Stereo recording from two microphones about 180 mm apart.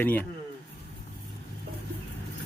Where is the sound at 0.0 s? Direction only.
10° left (ahead or behind).